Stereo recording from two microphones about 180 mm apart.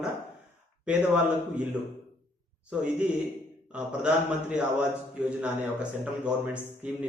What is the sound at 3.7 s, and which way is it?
Speech, 5° right (ahead or behind).